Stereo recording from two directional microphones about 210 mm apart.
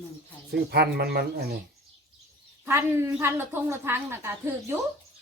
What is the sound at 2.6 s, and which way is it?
A woman's voice, 10° right (ahead or behind).